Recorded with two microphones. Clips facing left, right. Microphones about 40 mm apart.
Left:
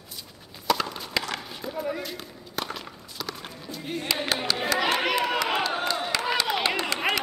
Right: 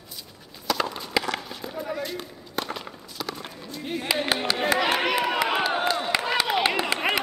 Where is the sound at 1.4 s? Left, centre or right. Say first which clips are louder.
Left 1 dB; centre.